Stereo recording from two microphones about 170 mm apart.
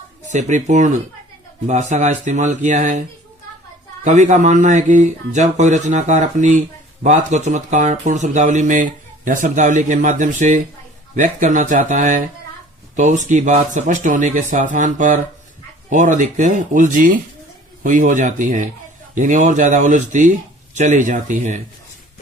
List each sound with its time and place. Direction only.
0.3 s speech: 45° right (ahead or behind)
4.0 s speech: 45° right (ahead or behind)